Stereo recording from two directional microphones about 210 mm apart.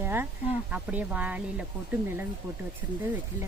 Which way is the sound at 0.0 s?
10° right (ahead or behind).